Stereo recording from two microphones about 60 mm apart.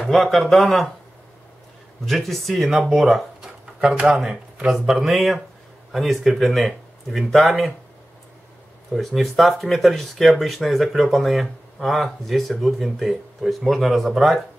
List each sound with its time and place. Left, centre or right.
0.0 s speech: centre
2.0 s speech: centre
3.9 s speech: centre
4.7 s speech: centre
8.9 s speech: centre